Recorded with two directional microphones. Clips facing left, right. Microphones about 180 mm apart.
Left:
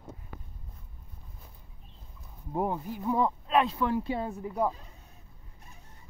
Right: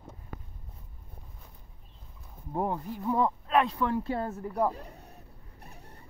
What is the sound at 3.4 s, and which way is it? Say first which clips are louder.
Speech: even; 25° left (ahead or behind).